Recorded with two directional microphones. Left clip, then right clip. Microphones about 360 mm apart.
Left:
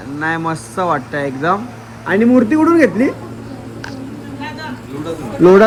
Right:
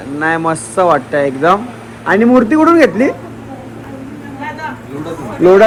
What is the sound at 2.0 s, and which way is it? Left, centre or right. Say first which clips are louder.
A man's voice: right 3 dB; centre.